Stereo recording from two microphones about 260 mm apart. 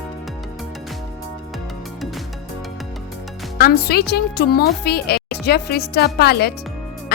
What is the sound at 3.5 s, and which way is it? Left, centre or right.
A woman's voice, left.